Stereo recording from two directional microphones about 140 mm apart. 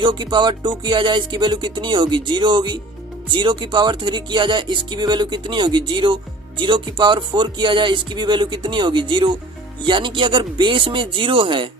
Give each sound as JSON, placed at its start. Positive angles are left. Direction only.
{"t": 0.0, "sound": "speech", "side_deg": -35}